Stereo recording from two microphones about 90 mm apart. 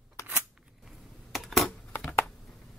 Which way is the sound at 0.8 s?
Centre (ahead or behind).